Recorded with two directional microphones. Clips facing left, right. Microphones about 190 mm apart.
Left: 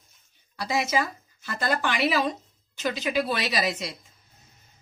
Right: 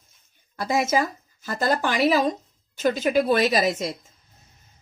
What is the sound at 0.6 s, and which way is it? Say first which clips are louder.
A woman's voice: right 4 dB; 50° right (ahead or behind).